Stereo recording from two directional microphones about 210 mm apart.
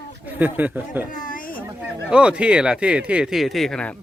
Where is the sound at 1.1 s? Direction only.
40° left (ahead or behind).